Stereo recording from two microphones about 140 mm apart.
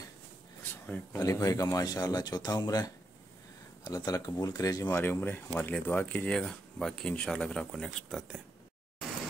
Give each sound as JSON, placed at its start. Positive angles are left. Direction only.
{"t": 1.1, "sound": "speech", "side_deg": 25}